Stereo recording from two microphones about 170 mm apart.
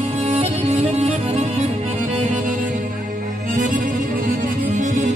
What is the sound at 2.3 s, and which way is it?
Music, 50° right (ahead or behind).